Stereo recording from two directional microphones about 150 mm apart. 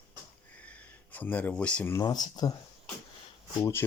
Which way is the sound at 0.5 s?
10° left (ahead or behind).